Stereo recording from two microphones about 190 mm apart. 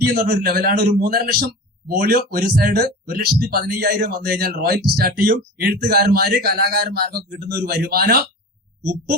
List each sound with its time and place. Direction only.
0.1 s a man's voice: 55° right (ahead or behind)